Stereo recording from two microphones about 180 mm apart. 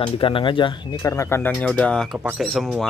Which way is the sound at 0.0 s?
30° left (ahead or behind).